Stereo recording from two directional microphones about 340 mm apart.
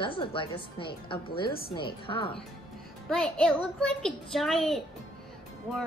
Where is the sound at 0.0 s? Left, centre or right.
Centre.